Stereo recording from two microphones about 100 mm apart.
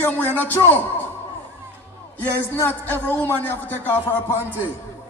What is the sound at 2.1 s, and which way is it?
A man's voice, 20° left (ahead or behind).